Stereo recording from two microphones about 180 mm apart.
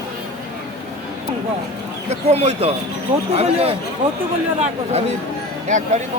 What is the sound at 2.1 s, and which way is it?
Speech, 35° right (ahead or behind).